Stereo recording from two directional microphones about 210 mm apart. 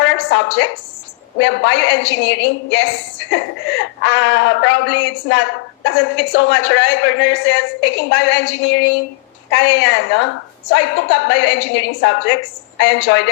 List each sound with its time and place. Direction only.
0.0 s a woman's voice: 60° left (ahead or behind)